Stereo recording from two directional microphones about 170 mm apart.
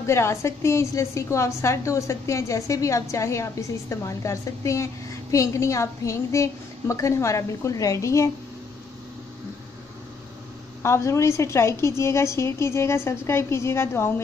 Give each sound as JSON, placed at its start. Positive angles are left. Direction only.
{"t": 0.0, "sound": "a woman's voice", "side_deg": 15}
{"t": 10.8, "sound": "a woman's voice", "side_deg": 15}